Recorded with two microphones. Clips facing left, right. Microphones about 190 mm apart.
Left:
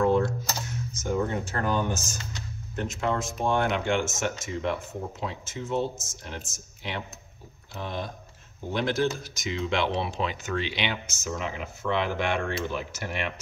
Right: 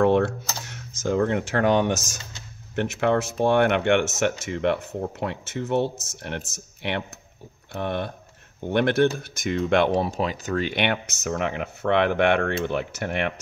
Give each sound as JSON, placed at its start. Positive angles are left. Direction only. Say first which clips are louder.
{"t": 0.0, "sound": "computer keyboard", "louder": "right 4 dB", "side_deg": -70}
{"t": 2.7, "sound": "speech", "louder": "right 7 dB", "side_deg": -70}
{"t": 10.7, "sound": "speech", "louder": "right 6 dB", "side_deg": -60}